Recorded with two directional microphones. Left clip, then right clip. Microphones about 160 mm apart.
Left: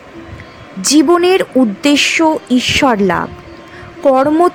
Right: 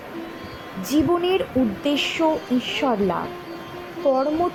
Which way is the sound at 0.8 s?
35° left (ahead or behind).